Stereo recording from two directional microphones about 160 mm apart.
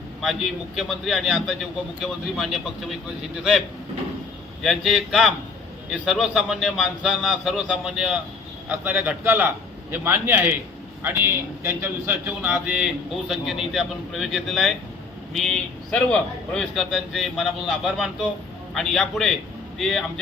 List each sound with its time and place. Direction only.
0.8 s a man's voice: centre (ahead or behind)
4.6 s a man's voice: centre (ahead or behind)